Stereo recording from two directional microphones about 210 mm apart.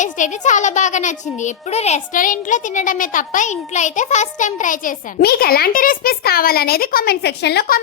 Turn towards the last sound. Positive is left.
turn(degrees=50)  # may be behind; listen again after turning